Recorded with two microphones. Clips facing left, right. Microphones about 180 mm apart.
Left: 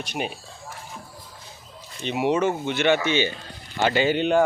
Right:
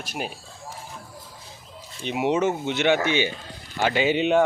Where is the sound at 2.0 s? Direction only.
15° right (ahead or behind).